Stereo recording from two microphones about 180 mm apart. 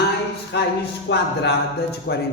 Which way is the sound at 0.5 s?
70° left (ahead or behind).